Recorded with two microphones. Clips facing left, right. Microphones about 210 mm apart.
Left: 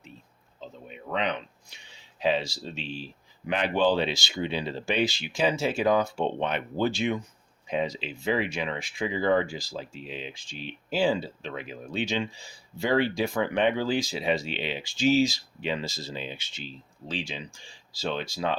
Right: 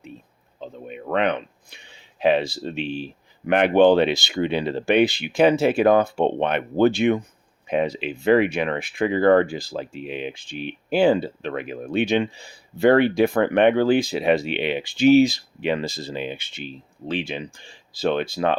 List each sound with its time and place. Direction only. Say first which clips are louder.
0.6 s speech: right 7 dB; 60° right (ahead or behind)